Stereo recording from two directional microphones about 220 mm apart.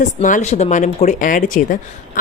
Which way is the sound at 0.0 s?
35° left (ahead or behind).